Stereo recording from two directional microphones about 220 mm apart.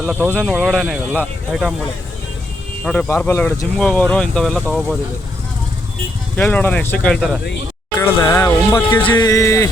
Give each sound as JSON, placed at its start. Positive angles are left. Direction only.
{"t": 0.0, "sound": "speech", "side_deg": -5}
{"t": 2.8, "sound": "speech", "side_deg": 0}
{"t": 6.3, "sound": "speech", "side_deg": 5}